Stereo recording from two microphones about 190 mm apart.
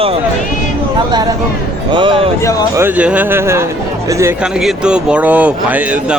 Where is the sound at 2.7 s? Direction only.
10° right (ahead or behind).